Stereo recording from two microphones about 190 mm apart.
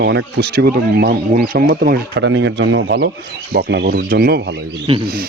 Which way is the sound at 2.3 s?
75° right (ahead or behind).